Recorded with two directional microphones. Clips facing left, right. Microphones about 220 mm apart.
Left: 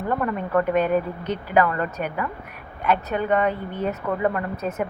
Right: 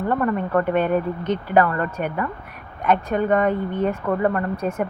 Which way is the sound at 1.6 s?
45° right (ahead or behind).